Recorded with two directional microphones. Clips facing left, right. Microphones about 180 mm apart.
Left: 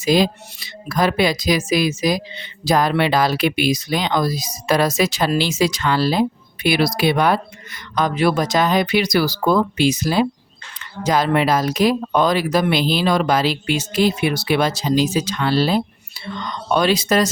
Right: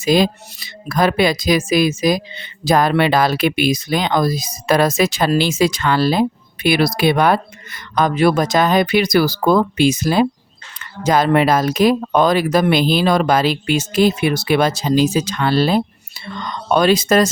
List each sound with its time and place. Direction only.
0.0 s speech: 50° right (ahead or behind)